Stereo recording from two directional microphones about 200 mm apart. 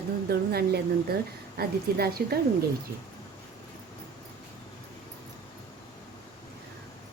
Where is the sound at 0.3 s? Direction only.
50° right (ahead or behind).